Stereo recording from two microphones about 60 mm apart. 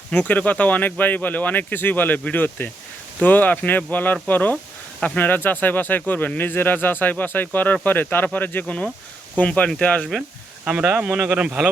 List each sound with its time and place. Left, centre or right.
0.1 s speech: left
8.6 s speech: left
10.7 s speech: centre